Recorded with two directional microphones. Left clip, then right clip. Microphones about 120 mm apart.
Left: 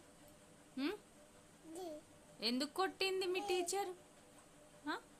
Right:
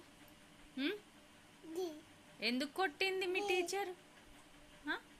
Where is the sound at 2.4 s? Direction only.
25° left (ahead or behind).